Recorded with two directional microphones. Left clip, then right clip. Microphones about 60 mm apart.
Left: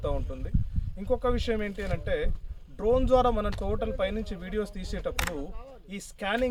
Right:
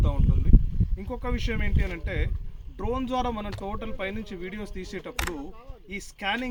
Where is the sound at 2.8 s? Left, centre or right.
Left.